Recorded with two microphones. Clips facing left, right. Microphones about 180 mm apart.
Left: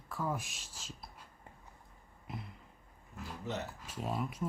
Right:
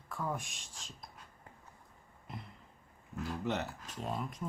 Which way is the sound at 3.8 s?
5° left (ahead or behind).